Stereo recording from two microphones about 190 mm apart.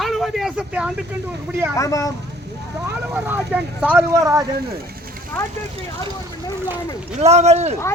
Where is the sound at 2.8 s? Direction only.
10° right (ahead or behind).